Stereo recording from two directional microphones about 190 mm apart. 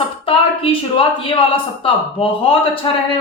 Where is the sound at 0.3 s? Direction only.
30° left (ahead or behind).